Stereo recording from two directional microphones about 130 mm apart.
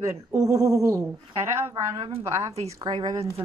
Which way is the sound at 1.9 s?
45° right (ahead or behind).